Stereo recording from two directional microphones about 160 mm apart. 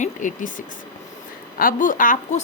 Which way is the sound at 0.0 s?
50° left (ahead or behind).